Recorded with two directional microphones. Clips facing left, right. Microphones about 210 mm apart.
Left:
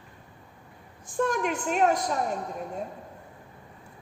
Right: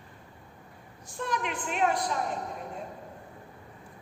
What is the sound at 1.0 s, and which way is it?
A woman's voice, 50° left (ahead or behind).